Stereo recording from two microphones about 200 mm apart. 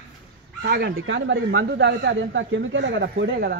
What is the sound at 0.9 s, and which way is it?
A man's voice, 65° right (ahead or behind).